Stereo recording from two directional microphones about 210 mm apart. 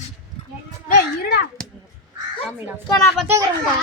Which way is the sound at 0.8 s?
45° left (ahead or behind).